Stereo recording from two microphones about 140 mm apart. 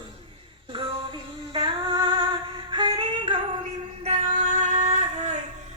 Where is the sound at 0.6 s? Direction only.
40° right (ahead or behind).